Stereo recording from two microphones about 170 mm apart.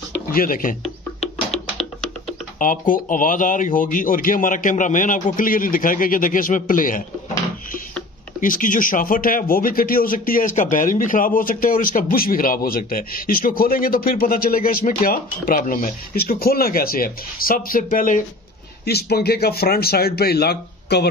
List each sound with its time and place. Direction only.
0.3 s speech: 55° left (ahead or behind)
2.6 s speech: 55° left (ahead or behind)
8.4 s speech: 50° left (ahead or behind)
18.9 s speech: 70° left (ahead or behind)